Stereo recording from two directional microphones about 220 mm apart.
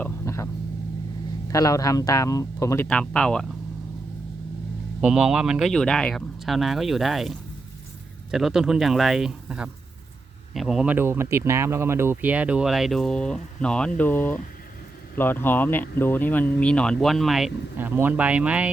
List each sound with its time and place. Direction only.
0.0 s vehicle: 10° left (ahead or behind)
1.5 s speech: 15° left (ahead or behind)
4.9 s speech: 5° right (ahead or behind)